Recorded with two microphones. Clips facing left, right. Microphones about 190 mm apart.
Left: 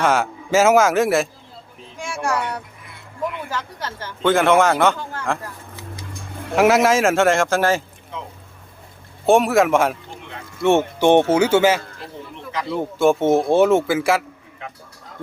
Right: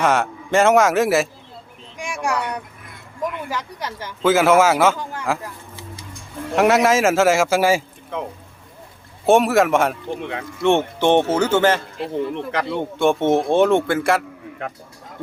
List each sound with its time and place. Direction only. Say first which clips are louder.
0.0 s a man's voice: even; centre (ahead or behind)
2.0 s a man's voice: even; 15° right (ahead or behind)
6.6 s a man's voice: even; centre (ahead or behind)
8.1 s speech: right 6 dB; 55° right (ahead or behind)
9.2 s a man's voice: even; centre (ahead or behind)
11.9 s speech: right 12 dB; 65° right (ahead or behind)
12.7 s a man's voice: left 3 dB; 5° left (ahead or behind)
14.6 s speech: right 6 dB; 55° right (ahead or behind)